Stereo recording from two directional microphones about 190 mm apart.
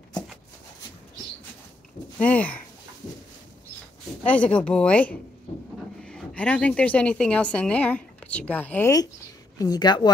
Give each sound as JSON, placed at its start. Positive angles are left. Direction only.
{"t": 2.1, "sound": "speech", "side_deg": 10}
{"t": 4.3, "sound": "a woman's voice", "side_deg": 5}